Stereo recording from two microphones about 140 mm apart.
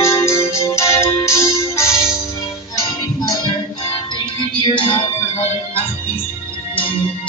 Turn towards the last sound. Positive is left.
turn(degrees=40)  # may be behind; listen again after turning